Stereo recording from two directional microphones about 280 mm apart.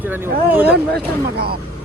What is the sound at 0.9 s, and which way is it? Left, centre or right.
Speech, right.